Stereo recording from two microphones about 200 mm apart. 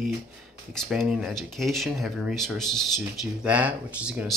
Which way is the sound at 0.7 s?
Centre (ahead or behind).